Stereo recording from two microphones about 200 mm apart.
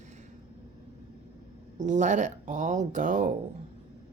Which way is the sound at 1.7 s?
40° right (ahead or behind).